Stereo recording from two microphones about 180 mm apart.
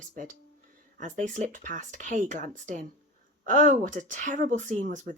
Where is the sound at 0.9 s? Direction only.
45° right (ahead or behind).